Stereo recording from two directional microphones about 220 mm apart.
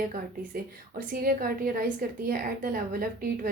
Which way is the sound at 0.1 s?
40° right (ahead or behind).